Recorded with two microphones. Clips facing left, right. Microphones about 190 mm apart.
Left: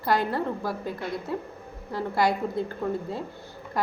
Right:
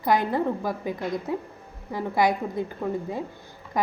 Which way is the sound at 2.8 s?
5° right (ahead or behind).